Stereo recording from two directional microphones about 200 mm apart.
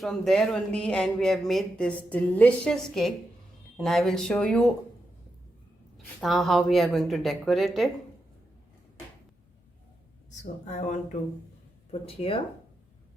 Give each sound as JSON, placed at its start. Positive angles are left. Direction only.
{"t": 0.0, "sound": "speech", "side_deg": 5}
{"t": 6.1, "sound": "speech", "side_deg": 0}
{"t": 10.7, "sound": "speech", "side_deg": 35}